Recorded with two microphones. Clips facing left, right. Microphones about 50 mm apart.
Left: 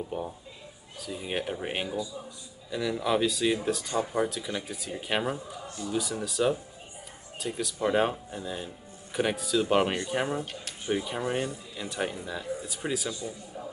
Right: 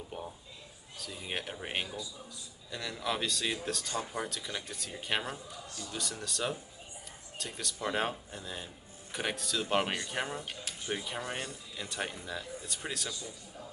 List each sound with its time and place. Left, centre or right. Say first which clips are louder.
0.1 s speech: left 7 dB; centre
13.1 s a man's voice: left 7 dB; left